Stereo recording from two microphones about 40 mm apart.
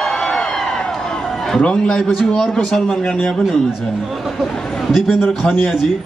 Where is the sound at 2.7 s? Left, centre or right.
Centre.